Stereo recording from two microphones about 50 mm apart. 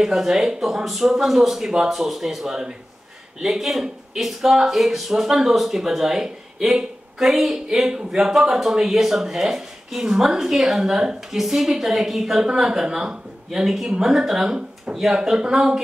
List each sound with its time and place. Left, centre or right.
0.0 s a man's voice: centre
8.3 s speech: centre